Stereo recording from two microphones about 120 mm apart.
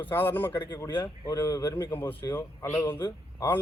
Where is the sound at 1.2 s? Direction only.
30° left (ahead or behind).